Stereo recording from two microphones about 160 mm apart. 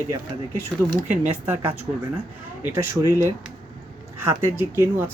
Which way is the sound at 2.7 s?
15° right (ahead or behind).